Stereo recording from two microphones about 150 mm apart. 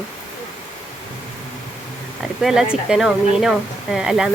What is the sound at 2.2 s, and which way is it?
Speech, centre (ahead or behind).